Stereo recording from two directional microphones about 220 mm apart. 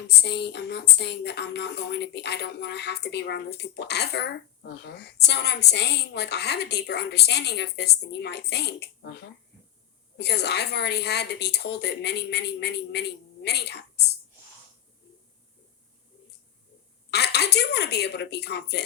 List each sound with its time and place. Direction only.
0.2 s a woman's voice: 50° left (ahead or behind)
17.1 s a woman's voice: 50° left (ahead or behind)